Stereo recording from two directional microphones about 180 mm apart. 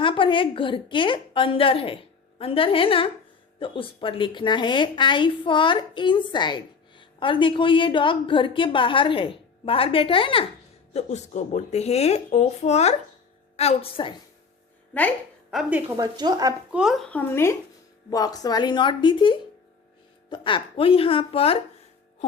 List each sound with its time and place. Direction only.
0.0 s a woman's voice: 30° left (ahead or behind)
15.4 s a woman's voice: 5° right (ahead or behind)
16.0 s speech: 20° right (ahead or behind)
16.7 s a woman's voice: centre (ahead or behind); by 21.6 s 30° left (ahead or behind)